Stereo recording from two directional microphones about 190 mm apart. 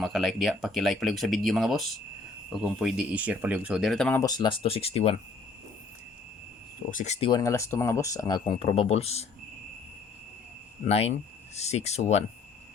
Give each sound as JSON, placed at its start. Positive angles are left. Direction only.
{"t": 0.0, "sound": "speech", "side_deg": 0}
{"t": 4.2, "sound": "speech", "side_deg": 20}
{"t": 6.9, "sound": "speech", "side_deg": 35}
{"t": 7.3, "sound": "speech", "side_deg": 20}
{"t": 10.8, "sound": "speech", "side_deg": 35}